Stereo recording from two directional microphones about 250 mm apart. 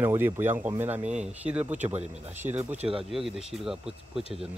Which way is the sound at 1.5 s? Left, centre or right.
Centre.